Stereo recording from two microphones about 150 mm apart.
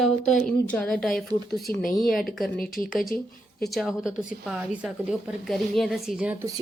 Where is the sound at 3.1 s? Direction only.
90° left.